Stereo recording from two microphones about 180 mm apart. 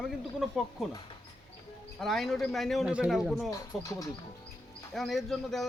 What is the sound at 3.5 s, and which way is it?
Speech, 20° left (ahead or behind).